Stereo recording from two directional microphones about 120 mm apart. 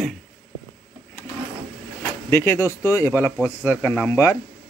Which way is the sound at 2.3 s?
25° left (ahead or behind).